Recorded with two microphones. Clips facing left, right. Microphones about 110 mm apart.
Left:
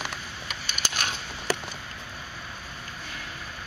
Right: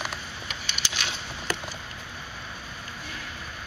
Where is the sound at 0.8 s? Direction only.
50° left (ahead or behind).